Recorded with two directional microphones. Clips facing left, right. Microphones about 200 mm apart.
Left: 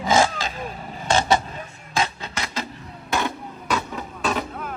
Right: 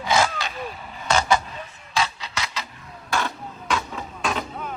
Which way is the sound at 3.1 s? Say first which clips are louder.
Left 2 dB; 20° left (ahead or behind).